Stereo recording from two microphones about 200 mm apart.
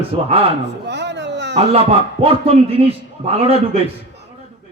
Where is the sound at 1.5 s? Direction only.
30° right (ahead or behind).